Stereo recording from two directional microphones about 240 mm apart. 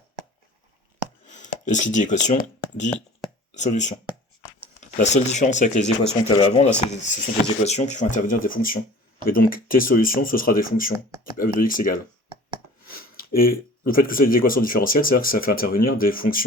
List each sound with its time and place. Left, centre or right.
1.3 s speech: left